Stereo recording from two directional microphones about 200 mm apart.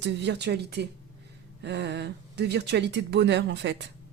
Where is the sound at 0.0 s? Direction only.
60° right (ahead or behind).